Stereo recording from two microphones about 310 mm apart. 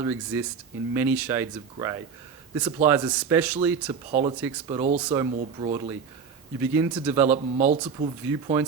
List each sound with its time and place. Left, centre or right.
0.0 s speech: centre
4.1 s speech: right; by 7.3 s centre
7.3 s speech: right
8.3 s speech: centre